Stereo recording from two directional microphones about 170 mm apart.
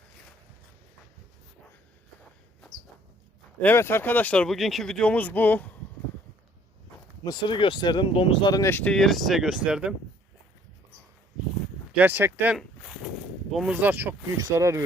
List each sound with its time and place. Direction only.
3.6 s speech: 10° left (ahead or behind)
7.3 s speech: 30° left (ahead or behind); by 9.9 s 5° right (ahead or behind)
11.9 s speech: 10° right (ahead or behind)